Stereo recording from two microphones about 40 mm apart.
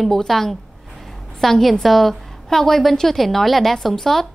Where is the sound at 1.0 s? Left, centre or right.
Centre.